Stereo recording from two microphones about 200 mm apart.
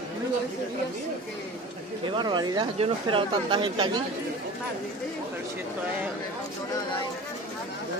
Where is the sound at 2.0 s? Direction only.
25° right (ahead or behind).